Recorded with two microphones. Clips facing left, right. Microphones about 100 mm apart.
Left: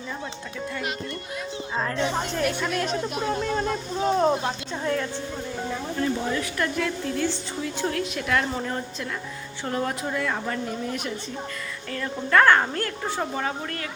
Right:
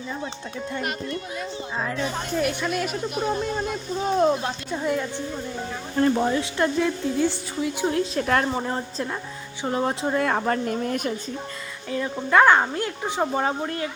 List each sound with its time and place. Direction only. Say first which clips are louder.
2.0 s speech: left 5 dB; 25° left (ahead or behind)
2.4 s speech: right 2 dB; 5° right (ahead or behind)
6.0 s a woman's voice: right 7 dB; 45° right (ahead or behind)
6.3 s speech: right 4 dB; 25° right (ahead or behind)
7.9 s a woman's voice: right 4 dB; 35° right (ahead or behind)
8.5 s speech: right 3 dB; 25° right (ahead or behind)
10.2 s a woman's voice: right 7 dB; 55° right (ahead or behind)
11.9 s speech: right 2 dB; 15° right (ahead or behind)